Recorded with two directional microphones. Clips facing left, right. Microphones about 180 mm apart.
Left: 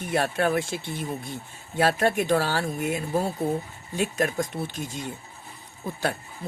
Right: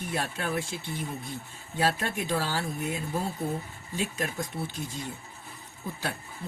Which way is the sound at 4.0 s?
70° left (ahead or behind).